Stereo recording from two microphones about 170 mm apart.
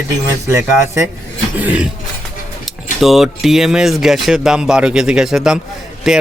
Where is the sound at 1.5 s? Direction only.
10° right (ahead or behind).